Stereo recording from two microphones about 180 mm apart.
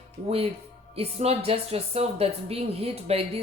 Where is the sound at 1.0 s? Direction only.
35° right (ahead or behind).